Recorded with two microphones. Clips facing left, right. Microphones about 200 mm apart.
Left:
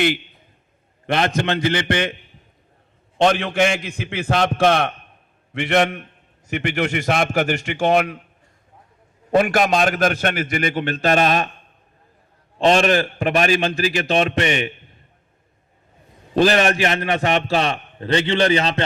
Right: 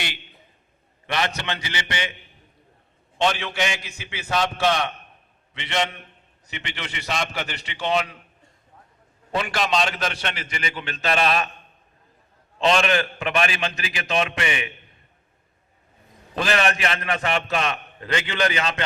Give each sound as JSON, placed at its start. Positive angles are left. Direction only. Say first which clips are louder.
{"t": 1.0, "sound": "a man's voice", "louder": "left 7 dB", "side_deg": 50}
{"t": 3.2, "sound": "a man's voice", "louder": "left 7 dB", "side_deg": 50}
{"t": 9.3, "sound": "a man's voice", "louder": "left 7 dB", "side_deg": 50}
{"t": 12.5, "sound": "a man's voice", "louder": "left 5 dB", "side_deg": 40}
{"t": 16.3, "sound": "a man's voice", "louder": "left 7 dB", "side_deg": 35}